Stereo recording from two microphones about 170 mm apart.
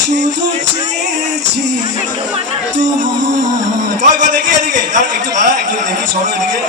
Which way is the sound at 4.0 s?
50° right (ahead or behind).